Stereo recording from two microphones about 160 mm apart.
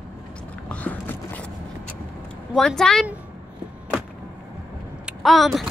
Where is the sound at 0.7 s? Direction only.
10° left (ahead or behind).